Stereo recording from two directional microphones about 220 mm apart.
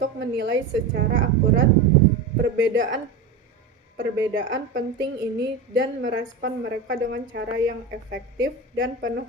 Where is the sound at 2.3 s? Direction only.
55° right (ahead or behind).